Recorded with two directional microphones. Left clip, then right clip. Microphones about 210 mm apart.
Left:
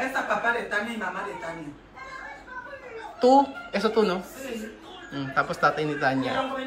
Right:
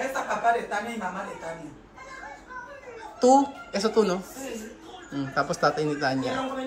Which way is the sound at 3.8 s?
20° right (ahead or behind).